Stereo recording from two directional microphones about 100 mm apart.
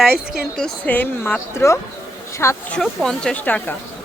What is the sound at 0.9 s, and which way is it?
Speech, 15° left (ahead or behind).